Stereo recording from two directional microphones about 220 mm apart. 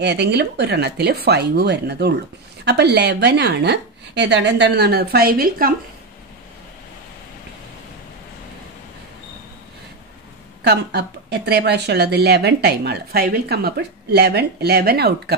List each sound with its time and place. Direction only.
0.0 s speech: 50° right (ahead or behind)
10.6 s speech: 50° right (ahead or behind)